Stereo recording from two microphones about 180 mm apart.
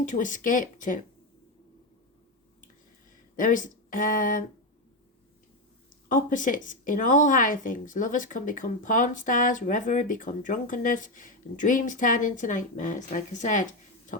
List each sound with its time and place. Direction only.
0.0 s speech: 45° left (ahead or behind)
3.3 s speech: 45° left (ahead or behind)
6.1 s speech: 45° left (ahead or behind)